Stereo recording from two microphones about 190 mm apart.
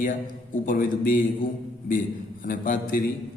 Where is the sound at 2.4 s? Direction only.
45° left (ahead or behind).